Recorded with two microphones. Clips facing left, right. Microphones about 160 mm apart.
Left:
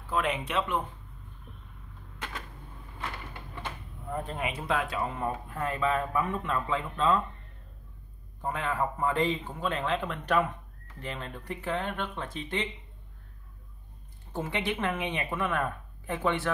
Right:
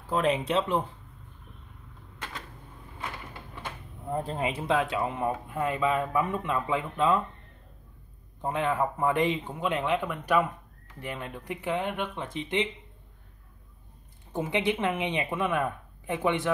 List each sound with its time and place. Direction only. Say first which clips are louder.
0.0 s speech: right 4 dB; 35° right (ahead or behind)
4.1 s speech: right 4 dB; 30° right (ahead or behind); by 7.2 s 15° right (ahead or behind)
8.4 s speech: right 3 dB; 25° right (ahead or behind)
14.3 s speech: right 4 dB; 15° right (ahead or behind)